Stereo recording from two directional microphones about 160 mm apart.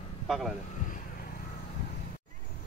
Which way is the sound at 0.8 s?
60° left (ahead or behind).